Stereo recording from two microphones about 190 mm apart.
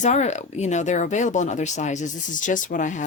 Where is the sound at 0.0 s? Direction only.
40° left (ahead or behind).